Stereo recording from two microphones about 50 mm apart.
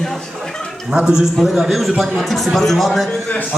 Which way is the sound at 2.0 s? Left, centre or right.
Centre.